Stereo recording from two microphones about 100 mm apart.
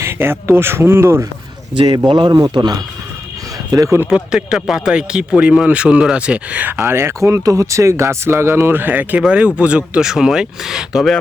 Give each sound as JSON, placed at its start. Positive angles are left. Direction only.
{"t": 0.0, "sound": "speech", "side_deg": -25}
{"t": 1.7, "sound": "speech", "side_deg": -55}
{"t": 2.4, "sound": "speech", "side_deg": -40}
{"t": 4.1, "sound": "a man's voice", "side_deg": -10}